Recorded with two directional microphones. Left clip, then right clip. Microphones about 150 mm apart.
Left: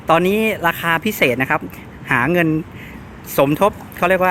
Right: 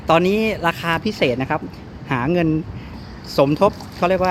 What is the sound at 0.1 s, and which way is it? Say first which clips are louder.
Speech: left 1 dB; 5° left (ahead or behind).